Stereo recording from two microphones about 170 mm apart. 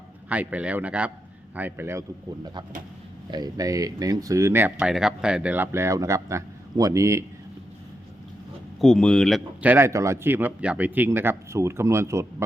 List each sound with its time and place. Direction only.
0.3 s speech: 10° right (ahead or behind)
8.8 s speech: 5° left (ahead or behind)
9.6 s speech: 10° right (ahead or behind)